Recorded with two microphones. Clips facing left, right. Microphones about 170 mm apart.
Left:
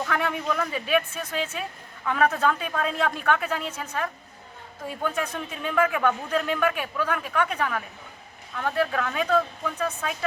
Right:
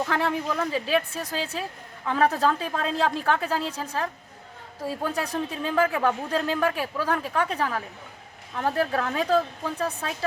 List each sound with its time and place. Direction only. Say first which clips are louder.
0.0 s speech: right 2 dB; 30° right (ahead or behind)